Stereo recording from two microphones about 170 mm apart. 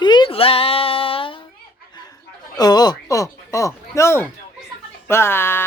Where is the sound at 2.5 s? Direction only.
25° left (ahead or behind).